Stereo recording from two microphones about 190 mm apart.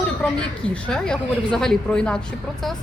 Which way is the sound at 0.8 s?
5° left (ahead or behind).